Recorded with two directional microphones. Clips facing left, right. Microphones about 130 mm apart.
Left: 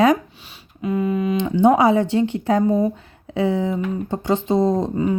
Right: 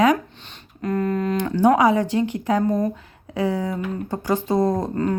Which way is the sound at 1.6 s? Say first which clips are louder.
Left 2 dB; 25° left (ahead or behind).